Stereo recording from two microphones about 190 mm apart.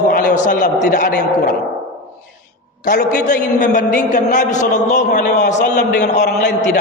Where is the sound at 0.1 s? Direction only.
45° left (ahead or behind).